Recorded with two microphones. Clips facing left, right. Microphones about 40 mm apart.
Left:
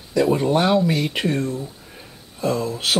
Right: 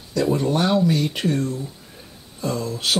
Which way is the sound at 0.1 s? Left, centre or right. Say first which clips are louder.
Left 3 dB; centre.